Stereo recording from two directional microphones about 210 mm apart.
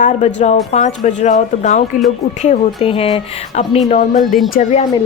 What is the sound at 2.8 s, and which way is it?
A woman's voice, 25° left (ahead or behind).